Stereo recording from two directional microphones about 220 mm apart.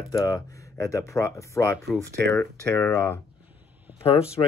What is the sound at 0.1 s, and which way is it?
Speech, 15° left (ahead or behind).